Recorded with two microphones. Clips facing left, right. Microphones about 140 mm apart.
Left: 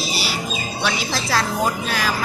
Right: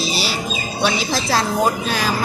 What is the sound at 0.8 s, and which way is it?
Speech, 25° right (ahead or behind).